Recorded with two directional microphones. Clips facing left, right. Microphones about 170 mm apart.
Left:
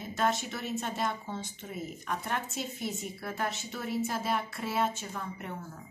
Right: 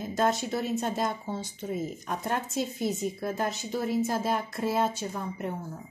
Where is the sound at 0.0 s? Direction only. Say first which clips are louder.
Right 4 dB; 35° right (ahead or behind).